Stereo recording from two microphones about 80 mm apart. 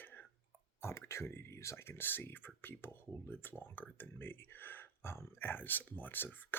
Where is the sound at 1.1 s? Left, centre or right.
Left.